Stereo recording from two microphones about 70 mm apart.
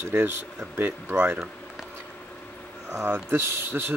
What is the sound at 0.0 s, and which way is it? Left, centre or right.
Speech, right.